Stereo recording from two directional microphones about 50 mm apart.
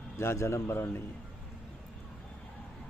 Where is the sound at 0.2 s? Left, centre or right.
Left.